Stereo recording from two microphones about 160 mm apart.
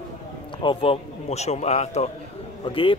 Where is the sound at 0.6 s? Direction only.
35° left (ahead or behind).